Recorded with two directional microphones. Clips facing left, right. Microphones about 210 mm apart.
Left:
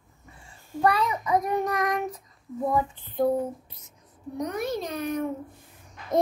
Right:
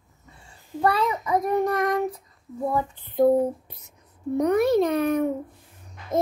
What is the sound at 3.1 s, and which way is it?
A child's voice, 55° right (ahead or behind).